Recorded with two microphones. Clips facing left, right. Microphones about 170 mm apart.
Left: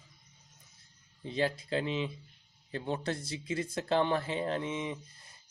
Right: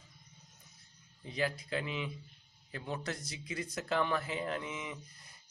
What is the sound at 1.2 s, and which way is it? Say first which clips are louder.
Speech: left 4 dB; 30° left (ahead or behind).